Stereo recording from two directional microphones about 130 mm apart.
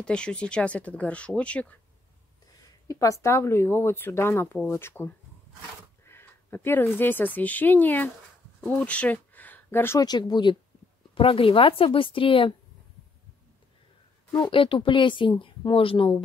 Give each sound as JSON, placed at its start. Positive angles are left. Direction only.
{"t": 0.0, "sound": "speech", "side_deg": 5}
{"t": 2.9, "sound": "speech", "side_deg": 25}
{"t": 8.5, "sound": "a sound", "side_deg": 10}
{"t": 9.9, "sound": "speech", "side_deg": 30}
{"t": 14.5, "sound": "speech", "side_deg": 40}